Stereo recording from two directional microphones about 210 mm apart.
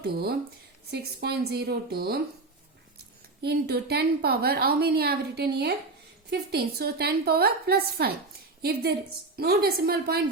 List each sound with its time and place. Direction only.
0.0 s a woman's voice: 45° right (ahead or behind)
3.4 s a woman's voice: 50° right (ahead or behind)